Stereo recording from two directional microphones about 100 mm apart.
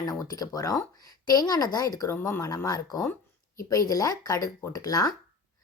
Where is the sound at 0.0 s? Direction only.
40° left (ahead or behind).